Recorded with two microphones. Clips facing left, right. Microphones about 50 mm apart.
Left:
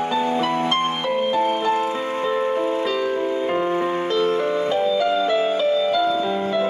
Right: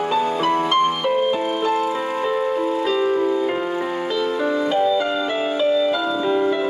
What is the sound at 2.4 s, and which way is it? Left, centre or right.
Music, left.